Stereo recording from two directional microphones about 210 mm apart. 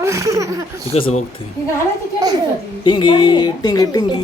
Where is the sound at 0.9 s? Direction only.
25° left (ahead or behind).